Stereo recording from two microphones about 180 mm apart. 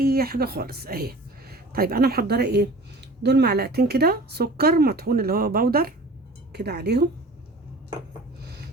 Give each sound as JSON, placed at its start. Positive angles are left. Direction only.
{"t": 0.0, "sound": "speech", "side_deg": -60}